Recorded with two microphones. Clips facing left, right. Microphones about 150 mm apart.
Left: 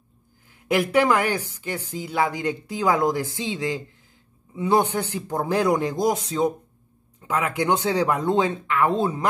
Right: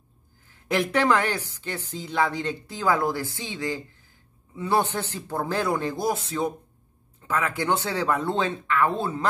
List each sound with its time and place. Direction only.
0.7 s a woman's voice: 10° left (ahead or behind)